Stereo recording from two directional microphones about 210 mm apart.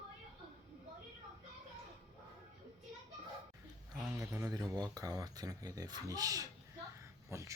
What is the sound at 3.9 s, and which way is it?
Speech, 15° right (ahead or behind).